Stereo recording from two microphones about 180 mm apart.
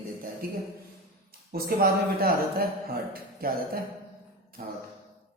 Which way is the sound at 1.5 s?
55° right (ahead or behind).